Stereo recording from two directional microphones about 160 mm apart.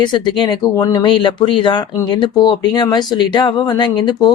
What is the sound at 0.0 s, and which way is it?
Speech, 30° left (ahead or behind).